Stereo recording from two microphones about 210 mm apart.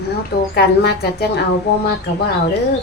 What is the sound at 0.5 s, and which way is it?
Speech, 50° left (ahead or behind).